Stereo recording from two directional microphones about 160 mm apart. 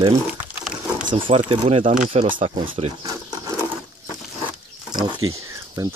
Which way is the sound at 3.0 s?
20° right (ahead or behind).